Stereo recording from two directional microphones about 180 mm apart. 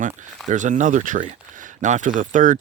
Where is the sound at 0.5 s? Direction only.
45° right (ahead or behind).